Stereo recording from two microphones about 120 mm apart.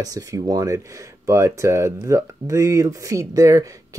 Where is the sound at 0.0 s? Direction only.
30° right (ahead or behind).